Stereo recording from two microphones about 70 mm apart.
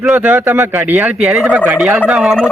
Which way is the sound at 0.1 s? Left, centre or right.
Centre.